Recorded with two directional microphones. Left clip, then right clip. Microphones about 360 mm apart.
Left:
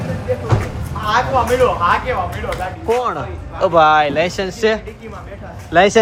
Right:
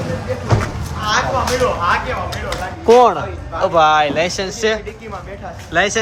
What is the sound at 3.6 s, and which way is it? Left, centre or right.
Speech, centre.